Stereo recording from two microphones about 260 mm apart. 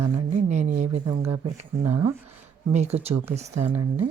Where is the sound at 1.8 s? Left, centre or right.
Centre.